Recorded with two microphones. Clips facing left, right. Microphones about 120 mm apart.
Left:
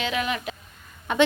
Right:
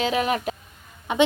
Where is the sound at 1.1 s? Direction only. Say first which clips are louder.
Right 1 dB; 15° right (ahead or behind).